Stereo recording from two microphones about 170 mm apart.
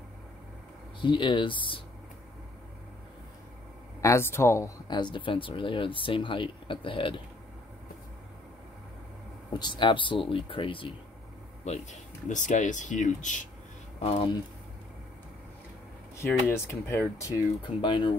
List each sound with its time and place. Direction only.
1.0 s speech: 30° left (ahead or behind)
4.0 s speech: 15° left (ahead or behind)
9.5 s speech: 25° left (ahead or behind)
11.6 s speech: 45° left (ahead or behind)
14.0 s speech: 35° left (ahead or behind)
16.2 s speech: 15° left (ahead or behind)
17.8 s speech: 30° left (ahead or behind)